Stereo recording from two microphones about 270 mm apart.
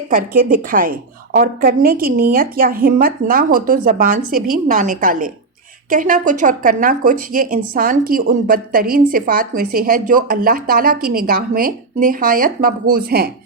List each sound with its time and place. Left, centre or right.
0.1 s speech: right